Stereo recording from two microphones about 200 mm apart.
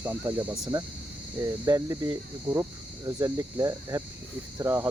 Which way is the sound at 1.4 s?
15° right (ahead or behind).